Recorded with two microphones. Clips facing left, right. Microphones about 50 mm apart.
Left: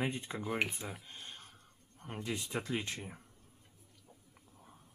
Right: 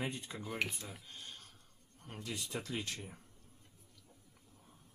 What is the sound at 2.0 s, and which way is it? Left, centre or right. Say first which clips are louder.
Speech: left 4 dB; left.